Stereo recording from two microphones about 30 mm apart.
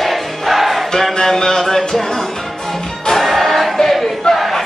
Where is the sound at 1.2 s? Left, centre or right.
Centre.